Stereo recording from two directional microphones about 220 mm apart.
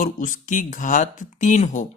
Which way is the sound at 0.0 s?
35° left (ahead or behind).